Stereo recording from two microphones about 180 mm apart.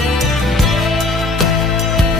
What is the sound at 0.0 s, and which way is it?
Music, centre (ahead or behind).